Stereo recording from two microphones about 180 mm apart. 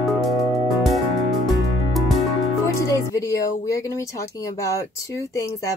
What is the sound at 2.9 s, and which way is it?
Speech, 15° left (ahead or behind).